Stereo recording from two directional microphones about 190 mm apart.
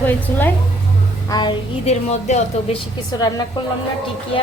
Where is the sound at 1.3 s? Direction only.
20° left (ahead or behind).